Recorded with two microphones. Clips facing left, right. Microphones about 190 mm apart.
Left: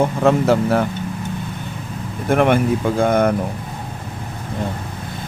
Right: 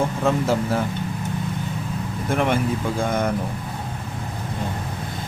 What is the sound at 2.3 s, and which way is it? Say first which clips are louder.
Speech: left 6 dB; 60° left (ahead or behind).